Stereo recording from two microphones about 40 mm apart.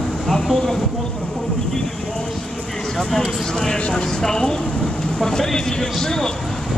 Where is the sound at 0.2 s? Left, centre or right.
Centre.